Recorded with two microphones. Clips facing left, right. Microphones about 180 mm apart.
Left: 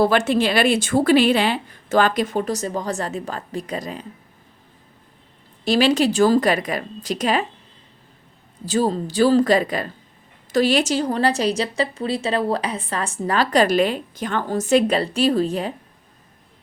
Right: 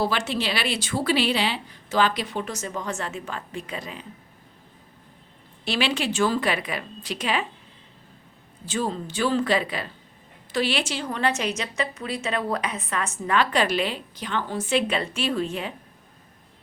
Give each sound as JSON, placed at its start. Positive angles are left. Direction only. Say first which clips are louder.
{"t": 0.0, "sound": "a woman's voice", "louder": "left 8 dB", "side_deg": 50}
{"t": 5.6, "sound": "a woman's voice", "louder": "left 9 dB", "side_deg": 40}
{"t": 8.6, "sound": "a woman's voice", "louder": "left 7 dB", "side_deg": 40}